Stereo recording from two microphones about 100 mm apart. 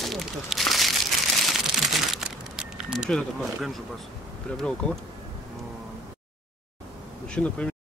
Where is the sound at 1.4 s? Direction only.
Centre (ahead or behind).